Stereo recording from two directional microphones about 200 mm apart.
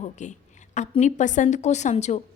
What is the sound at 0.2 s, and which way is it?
A woman's voice, 35° left (ahead or behind).